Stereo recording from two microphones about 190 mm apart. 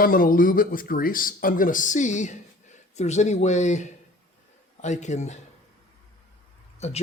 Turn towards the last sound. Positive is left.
turn(degrees=35)  # may be behind; listen again after turning